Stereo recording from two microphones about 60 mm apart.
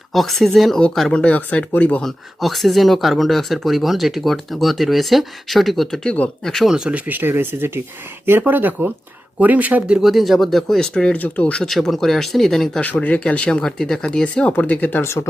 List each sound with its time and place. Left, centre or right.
0.1 s speech: centre
1.1 s speech: left
2.0 s speech: centre
6.7 s speech: centre
6.9 s speech: right
10.0 s speech: centre; by 11.6 s left
11.6 s speech: centre
12.8 s speech: left
14.5 s speech: left
15.0 s speech: left